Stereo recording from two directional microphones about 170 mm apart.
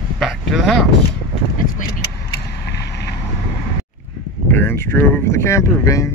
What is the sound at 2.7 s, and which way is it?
Vehicle, 85° left.